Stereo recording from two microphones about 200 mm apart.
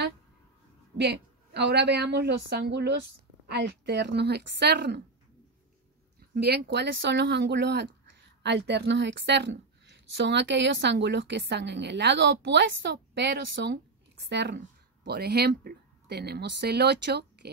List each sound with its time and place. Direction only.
0.9 s a woman's voice: 55° right (ahead or behind)
6.3 s a woman's voice: 55° right (ahead or behind)